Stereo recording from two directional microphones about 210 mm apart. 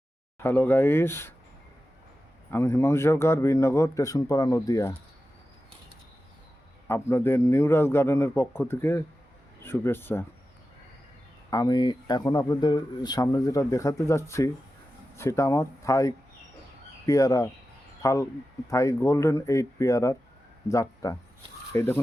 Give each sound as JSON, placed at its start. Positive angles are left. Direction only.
{"t": 0.4, "sound": "speech", "side_deg": 10}
{"t": 2.5, "sound": "speech", "side_deg": 10}
{"t": 6.8, "sound": "speech", "side_deg": 10}
{"t": 11.5, "sound": "speech", "side_deg": 20}